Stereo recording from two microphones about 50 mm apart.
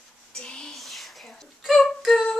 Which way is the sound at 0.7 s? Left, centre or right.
Centre.